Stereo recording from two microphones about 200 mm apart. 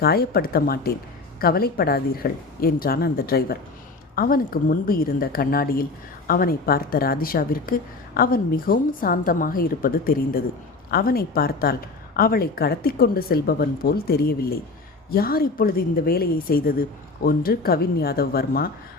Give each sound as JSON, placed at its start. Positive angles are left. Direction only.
{"t": 0.0, "sound": "a woman's voice", "side_deg": 50}